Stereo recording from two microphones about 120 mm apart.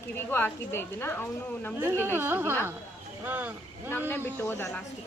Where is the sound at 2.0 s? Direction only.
20° right (ahead or behind).